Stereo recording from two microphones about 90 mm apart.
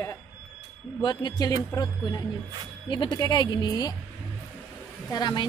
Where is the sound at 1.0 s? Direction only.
50° left (ahead or behind).